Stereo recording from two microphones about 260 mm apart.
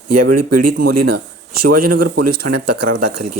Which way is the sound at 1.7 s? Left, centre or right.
Right.